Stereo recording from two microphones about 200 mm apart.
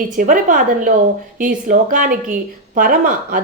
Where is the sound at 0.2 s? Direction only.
40° right (ahead or behind).